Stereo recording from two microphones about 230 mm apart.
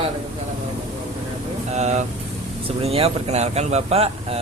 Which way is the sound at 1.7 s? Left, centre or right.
Right.